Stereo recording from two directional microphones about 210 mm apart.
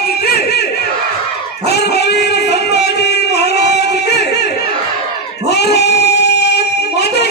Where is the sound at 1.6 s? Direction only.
50° left (ahead or behind).